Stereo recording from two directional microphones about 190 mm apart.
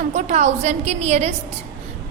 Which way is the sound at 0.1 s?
40° right (ahead or behind).